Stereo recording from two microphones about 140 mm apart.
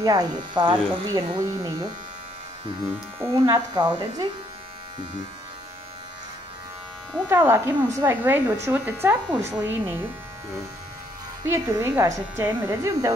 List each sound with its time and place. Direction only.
0.0 s speech: 25° right (ahead or behind)
3.2 s speech: 20° right (ahead or behind)
3.7 s speech: 30° right (ahead or behind)
7.2 s speech: 20° right (ahead or behind)
11.4 s speech: 20° right (ahead or behind)